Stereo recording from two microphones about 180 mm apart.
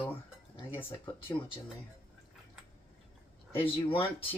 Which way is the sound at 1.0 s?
25° left (ahead or behind).